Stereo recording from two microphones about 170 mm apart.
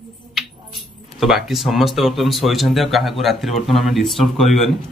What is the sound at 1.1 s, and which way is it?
Speech, centre (ahead or behind).